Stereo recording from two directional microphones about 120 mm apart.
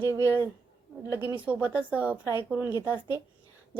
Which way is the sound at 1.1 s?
20° right (ahead or behind).